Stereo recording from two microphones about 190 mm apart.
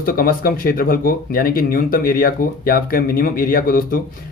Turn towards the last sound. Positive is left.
turn(degrees=50)  # may be behind; listen again after turning